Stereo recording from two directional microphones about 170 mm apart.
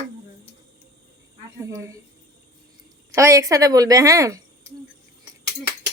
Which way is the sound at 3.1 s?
20° right (ahead or behind).